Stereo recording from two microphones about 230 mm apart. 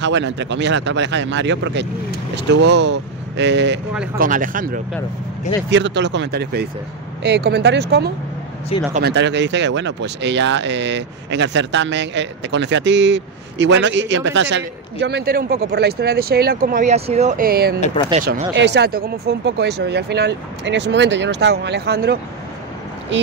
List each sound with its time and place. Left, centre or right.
0.0 s speech: right
4.2 s speech: right
5.7 s speech: right